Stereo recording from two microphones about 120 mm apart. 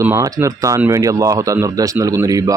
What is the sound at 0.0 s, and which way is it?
Speech, 25° right (ahead or behind).